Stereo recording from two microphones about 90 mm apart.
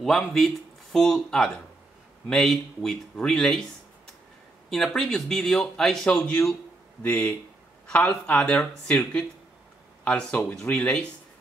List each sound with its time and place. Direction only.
0.0 s speech: 5° left (ahead or behind)
4.6 s speech: 5° left (ahead or behind)